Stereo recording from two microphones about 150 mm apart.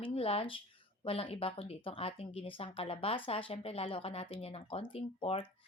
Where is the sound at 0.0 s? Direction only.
40° left (ahead or behind).